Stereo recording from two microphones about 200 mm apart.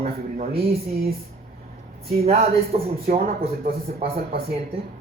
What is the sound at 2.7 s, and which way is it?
Speech, 35° right (ahead or behind).